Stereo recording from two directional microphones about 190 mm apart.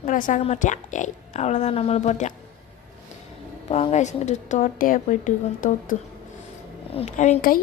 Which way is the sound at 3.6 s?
35° left (ahead or behind).